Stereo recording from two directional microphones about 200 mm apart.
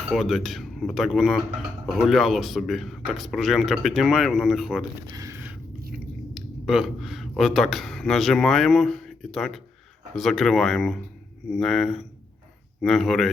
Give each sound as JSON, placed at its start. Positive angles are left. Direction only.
{"t": 0.1, "sound": "speech", "side_deg": 0}
{"t": 5.1, "sound": "a sound", "side_deg": -15}
{"t": 6.3, "sound": "speech", "side_deg": -5}